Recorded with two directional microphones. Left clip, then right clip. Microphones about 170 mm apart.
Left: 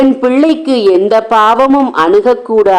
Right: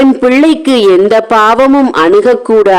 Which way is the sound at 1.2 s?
55° right (ahead or behind).